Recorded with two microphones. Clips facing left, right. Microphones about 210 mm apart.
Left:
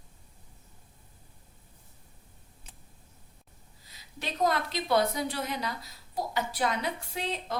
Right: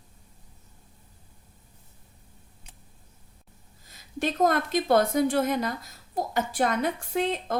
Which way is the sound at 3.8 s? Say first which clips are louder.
Right 10 dB; 50° right (ahead or behind).